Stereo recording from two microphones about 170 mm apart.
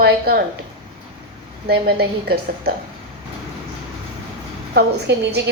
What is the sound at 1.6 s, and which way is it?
A woman's voice, 70° right (ahead or behind).